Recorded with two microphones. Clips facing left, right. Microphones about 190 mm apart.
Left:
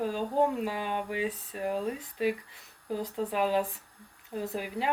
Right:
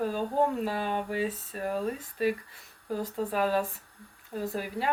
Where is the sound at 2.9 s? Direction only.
15° left (ahead or behind).